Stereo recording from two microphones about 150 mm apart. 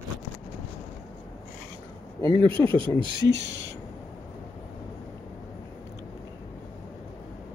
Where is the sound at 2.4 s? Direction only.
35° right (ahead or behind).